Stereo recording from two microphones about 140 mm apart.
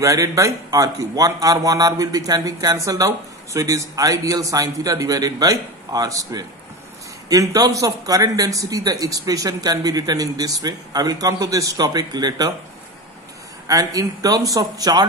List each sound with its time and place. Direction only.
0.0 s a man's voice: 25° right (ahead or behind)
13.7 s a man's voice: 25° right (ahead or behind)